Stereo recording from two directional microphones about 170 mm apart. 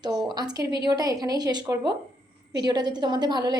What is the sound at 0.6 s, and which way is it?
Speech, 75° right (ahead or behind).